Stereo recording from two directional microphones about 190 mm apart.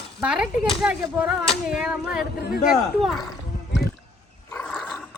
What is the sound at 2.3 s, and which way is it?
Speech, 55° left (ahead or behind).